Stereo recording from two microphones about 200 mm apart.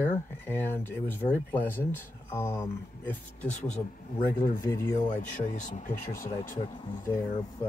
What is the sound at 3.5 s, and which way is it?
Speech, 35° left (ahead or behind).